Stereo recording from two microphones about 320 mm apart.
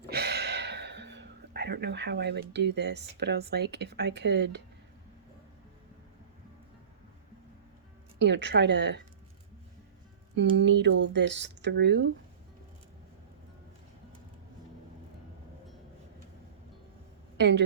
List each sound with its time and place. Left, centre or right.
0.1 s speech: right
8.2 s speech: right
10.3 s speech: right
17.3 s a woman's voice: right